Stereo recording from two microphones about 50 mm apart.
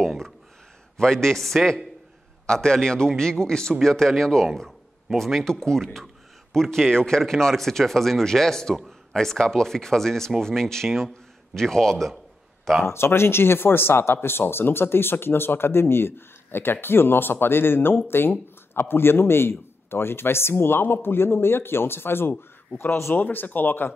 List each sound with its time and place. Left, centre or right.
0.9 s speech: centre
12.8 s a man's voice: left
23.1 s speech: left